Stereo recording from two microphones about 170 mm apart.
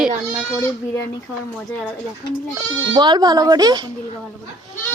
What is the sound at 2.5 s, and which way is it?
Speech, 25° right (ahead or behind).